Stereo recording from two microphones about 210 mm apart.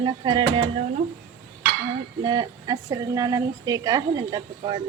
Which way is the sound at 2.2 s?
20° right (ahead or behind).